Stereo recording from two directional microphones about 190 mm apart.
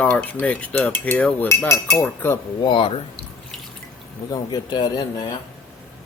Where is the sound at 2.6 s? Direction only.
25° left (ahead or behind).